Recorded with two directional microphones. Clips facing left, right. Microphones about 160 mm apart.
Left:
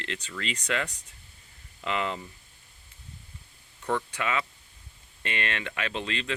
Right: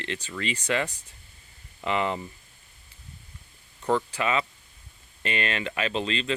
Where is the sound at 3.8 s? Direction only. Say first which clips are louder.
Right 4 dB; 30° right (ahead or behind).